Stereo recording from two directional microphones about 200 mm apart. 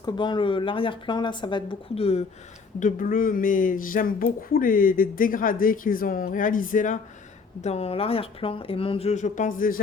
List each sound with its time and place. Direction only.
0.0 s speech: 25° left (ahead or behind)
2.8 s speech: 45° left (ahead or behind)